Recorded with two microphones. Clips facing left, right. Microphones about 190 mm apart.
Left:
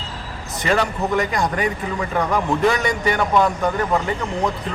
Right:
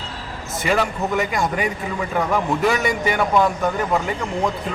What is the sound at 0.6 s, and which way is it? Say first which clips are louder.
A man's voice: left 1 dB; 5° right (ahead or behind).